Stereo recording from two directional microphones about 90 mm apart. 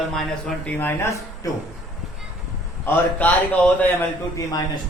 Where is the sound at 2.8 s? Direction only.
15° left (ahead or behind).